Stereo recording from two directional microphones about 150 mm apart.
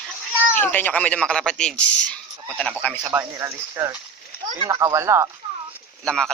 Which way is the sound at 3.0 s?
20° right (ahead or behind).